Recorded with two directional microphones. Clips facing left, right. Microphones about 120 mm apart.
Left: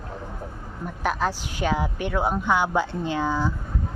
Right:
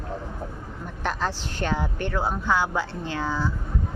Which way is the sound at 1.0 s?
10° left (ahead or behind).